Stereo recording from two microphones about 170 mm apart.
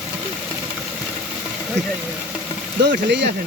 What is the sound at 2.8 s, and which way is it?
Speech, 90° right.